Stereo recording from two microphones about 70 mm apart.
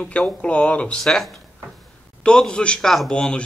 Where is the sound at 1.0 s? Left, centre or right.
Centre.